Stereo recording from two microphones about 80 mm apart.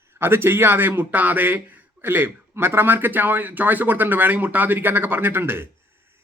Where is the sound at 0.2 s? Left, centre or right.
Right.